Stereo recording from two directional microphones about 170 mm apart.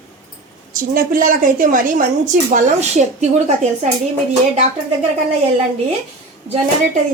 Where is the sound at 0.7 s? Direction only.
55° right (ahead or behind).